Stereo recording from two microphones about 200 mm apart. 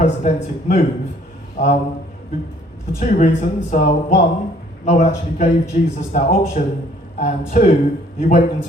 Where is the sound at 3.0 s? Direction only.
40° left (ahead or behind).